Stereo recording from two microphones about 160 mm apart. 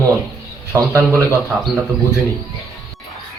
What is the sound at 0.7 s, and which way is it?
Speech, 20° right (ahead or behind).